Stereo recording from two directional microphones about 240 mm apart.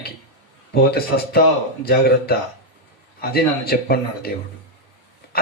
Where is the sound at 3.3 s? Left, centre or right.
Left.